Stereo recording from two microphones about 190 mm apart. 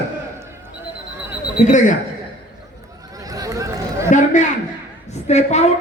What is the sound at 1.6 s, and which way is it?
Speech, 40° left (ahead or behind).